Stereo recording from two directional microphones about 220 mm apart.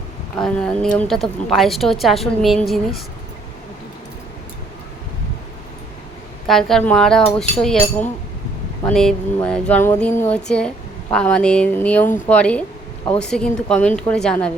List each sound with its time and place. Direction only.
0.3 s a woman's voice: 5° left (ahead or behind)
6.5 s a woman's voice: centre (ahead or behind)